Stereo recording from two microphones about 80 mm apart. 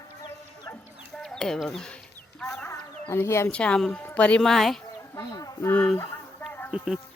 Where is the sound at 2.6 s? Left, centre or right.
Left.